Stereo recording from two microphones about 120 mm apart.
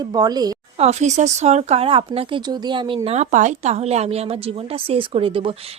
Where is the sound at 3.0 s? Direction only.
70° right (ahead or behind).